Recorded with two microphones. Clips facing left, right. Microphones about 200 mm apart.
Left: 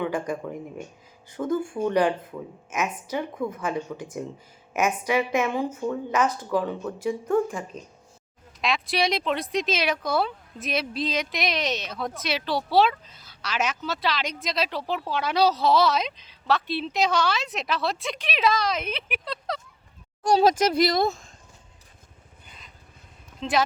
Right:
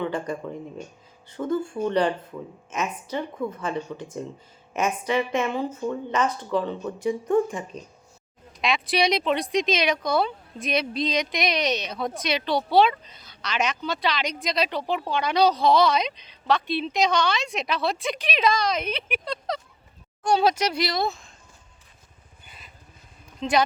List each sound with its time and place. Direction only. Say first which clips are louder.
0.0 s a woman's voice: even; 10° left (ahead or behind)
20.2 s speech: left 2 dB; 40° left (ahead or behind)
22.4 s vehicle: right 1 dB; 5° right (ahead or behind)
23.4 s speech: right 2 dB; centre (ahead or behind)